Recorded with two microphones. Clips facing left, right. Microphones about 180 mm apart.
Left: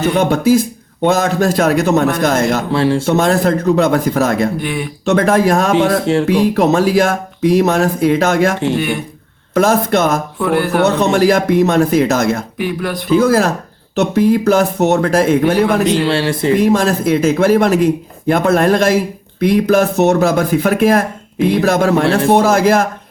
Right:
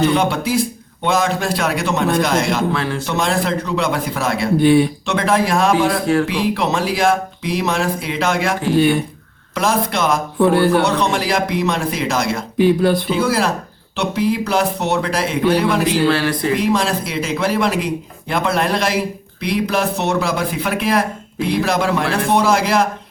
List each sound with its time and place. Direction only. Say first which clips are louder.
0.2 s a man's voice: left 6 dB; 45° left (ahead or behind)
2.7 s speech: left 8 dB; 30° left (ahead or behind)
3.1 s a man's voice: left 3 dB; 45° left (ahead or behind)
4.6 s speech: right 9 dB; 30° right (ahead or behind)
5.0 s a man's voice: left 5 dB; 45° left (ahead or behind)
9.6 s a man's voice: left 6 dB; 45° left (ahead or behind)
10.4 s speech: right 2 dB; 30° right (ahead or behind)
10.8 s a man's voice: left 6 dB; 45° left (ahead or behind)
12.5 s speech: right 6 dB; 30° right (ahead or behind)
13.1 s a man's voice: left 6 dB; 45° left (ahead or behind)
15.9 s speech: left 2 dB; 25° left (ahead or behind)
16.6 s a man's voice: left 5 dB; 45° left (ahead or behind)